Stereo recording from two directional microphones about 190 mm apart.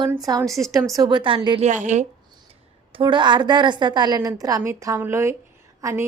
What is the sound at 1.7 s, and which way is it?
Speech, 40° right (ahead or behind).